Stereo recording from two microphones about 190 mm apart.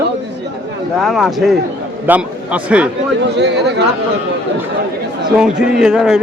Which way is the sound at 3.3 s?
65° right (ahead or behind).